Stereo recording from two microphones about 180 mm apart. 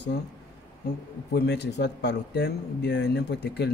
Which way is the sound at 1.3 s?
70° left (ahead or behind).